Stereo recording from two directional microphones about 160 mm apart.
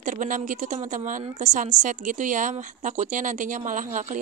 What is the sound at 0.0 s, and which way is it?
Speech, 55° right (ahead or behind).